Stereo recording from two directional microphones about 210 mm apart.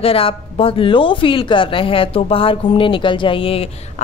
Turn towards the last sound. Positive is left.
turn(degrees=25)  # may be behind; listen again after turning